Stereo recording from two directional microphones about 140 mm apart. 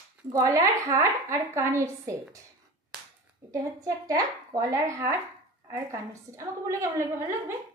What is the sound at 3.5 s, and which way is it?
A woman's voice, 25° right (ahead or behind).